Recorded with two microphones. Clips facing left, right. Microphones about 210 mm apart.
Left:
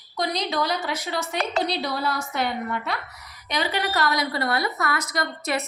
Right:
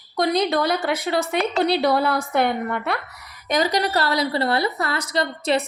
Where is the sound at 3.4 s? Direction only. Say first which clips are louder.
Right 6 dB; 45° right (ahead or behind).